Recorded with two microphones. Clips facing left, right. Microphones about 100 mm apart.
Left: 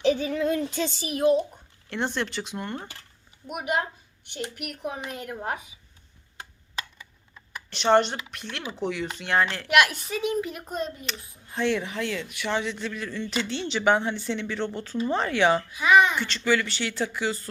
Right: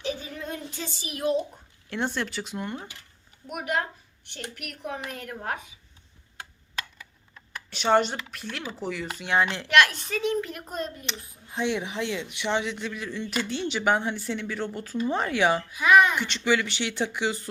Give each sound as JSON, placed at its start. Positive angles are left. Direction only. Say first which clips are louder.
{"t": 0.0, "sound": "a sound", "louder": "left 10 dB", "side_deg": 70}
{"t": 0.9, "sound": "a child's voice", "louder": "left 6 dB", "side_deg": 40}
{"t": 1.9, "sound": "speech", "louder": "left 1 dB", "side_deg": -5}
{"t": 3.4, "sound": "a woman's voice", "louder": "left 1 dB", "side_deg": 10}
{"t": 7.7, "sound": "speech", "louder": "left 2 dB", "side_deg": -5}
{"t": 9.6, "sound": "a woman's voice", "louder": "even", "side_deg": 10}
{"t": 11.4, "sound": "a man's voice", "louder": "left 2 dB", "side_deg": -15}
{"t": 16.2, "sound": "a man's voice", "louder": "even", "side_deg": -15}